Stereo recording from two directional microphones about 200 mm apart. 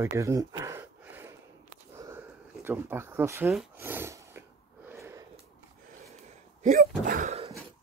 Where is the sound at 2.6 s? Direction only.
10° right (ahead or behind).